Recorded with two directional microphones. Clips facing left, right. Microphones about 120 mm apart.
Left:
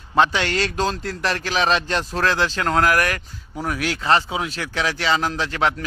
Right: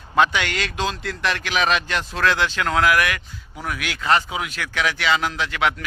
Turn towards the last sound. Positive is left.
turn(degrees=35)  # may be behind; listen again after turning